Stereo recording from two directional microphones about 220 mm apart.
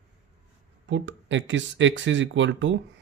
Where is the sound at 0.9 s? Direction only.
55° right (ahead or behind).